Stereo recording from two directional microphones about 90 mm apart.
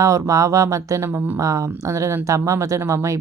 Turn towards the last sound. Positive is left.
turn(degrees=-35)  # may be behind; listen again after turning